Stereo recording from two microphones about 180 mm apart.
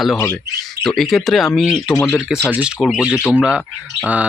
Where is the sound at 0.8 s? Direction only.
Centre (ahead or behind).